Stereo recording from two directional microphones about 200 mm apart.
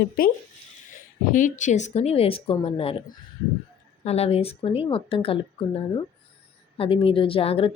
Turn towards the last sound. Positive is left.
turn(degrees=30)  # may be behind; listen again after turning